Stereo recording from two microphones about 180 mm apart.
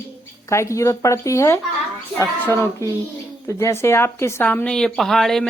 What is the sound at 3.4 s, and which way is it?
A woman's voice, 15° left (ahead or behind).